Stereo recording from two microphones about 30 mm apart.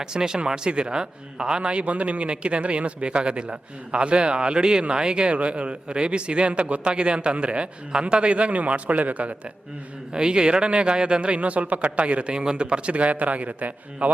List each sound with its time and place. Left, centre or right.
0.0 s a man's voice: right
10.1 s a man's voice: right
11.3 s a man's voice: right
12.3 s a man's voice: right